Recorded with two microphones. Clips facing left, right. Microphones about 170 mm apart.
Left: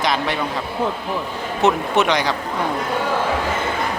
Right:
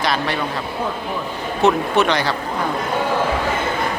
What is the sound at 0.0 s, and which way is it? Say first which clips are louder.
Speech: even; 20° left (ahead or behind).